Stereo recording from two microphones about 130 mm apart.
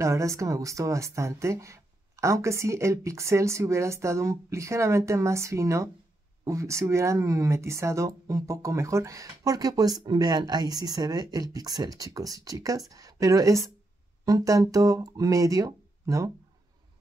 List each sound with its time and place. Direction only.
0.0 s a woman's voice: 25° right (ahead or behind)